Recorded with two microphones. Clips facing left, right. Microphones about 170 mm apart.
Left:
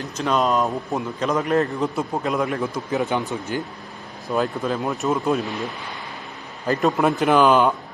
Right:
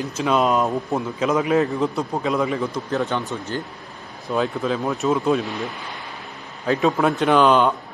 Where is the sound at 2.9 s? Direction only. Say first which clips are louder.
Left 1 dB; 15° left (ahead or behind).